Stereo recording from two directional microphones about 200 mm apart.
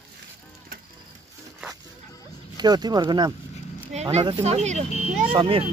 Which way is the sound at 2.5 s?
20° right (ahead or behind).